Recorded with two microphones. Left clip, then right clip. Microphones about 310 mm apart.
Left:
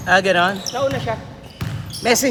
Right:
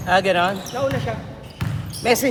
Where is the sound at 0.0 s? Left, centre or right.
Left.